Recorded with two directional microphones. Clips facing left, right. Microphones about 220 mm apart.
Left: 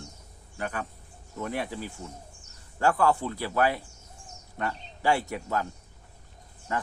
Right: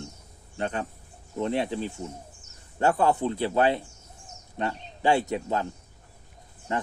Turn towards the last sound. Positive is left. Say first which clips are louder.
# right 2 dB
turn(degrees=-25)  # may be behind; listen again after turning